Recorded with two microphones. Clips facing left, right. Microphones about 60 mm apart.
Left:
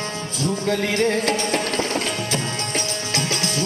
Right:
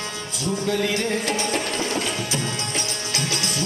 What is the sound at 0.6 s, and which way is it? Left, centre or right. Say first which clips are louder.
Music: left 3 dB; left.